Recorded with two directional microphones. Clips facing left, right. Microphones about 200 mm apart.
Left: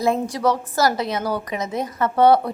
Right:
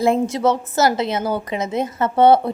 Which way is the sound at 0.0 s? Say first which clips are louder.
Right 3 dB; 25° right (ahead or behind).